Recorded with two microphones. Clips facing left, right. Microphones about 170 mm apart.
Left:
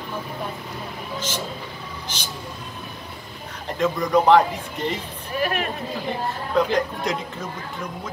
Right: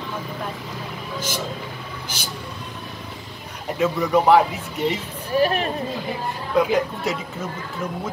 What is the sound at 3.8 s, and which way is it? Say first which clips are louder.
A man's voice: right 1 dB; 5° right (ahead or behind).